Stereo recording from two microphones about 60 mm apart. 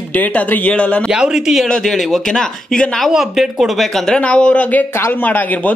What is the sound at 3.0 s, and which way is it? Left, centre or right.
Speech, centre.